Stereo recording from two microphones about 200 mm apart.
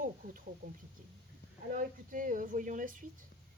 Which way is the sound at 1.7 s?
40° right (ahead or behind).